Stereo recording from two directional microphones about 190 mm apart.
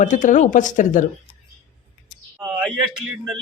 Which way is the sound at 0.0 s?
40° left (ahead or behind).